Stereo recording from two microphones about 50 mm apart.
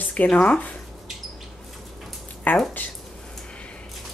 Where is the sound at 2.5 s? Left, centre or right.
Left.